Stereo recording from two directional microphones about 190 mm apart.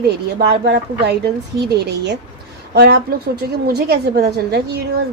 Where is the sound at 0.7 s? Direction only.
60° right (ahead or behind).